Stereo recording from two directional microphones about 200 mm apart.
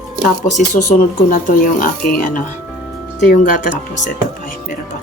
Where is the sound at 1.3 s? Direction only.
40° left (ahead or behind).